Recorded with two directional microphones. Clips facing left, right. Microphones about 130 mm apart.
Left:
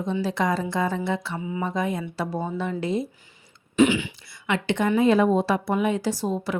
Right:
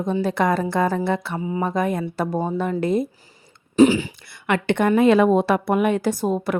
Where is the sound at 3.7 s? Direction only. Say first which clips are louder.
Right 5 dB; 35° right (ahead or behind).